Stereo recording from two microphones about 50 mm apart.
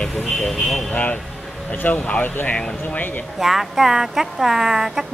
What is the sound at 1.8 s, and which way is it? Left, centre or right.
Speech, left.